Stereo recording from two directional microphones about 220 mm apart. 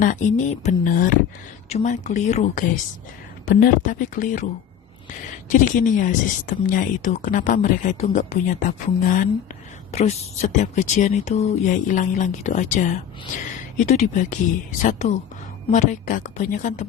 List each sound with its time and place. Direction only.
0.0 s speech: 35° left (ahead or behind)
5.5 s speech: 35° left (ahead or behind)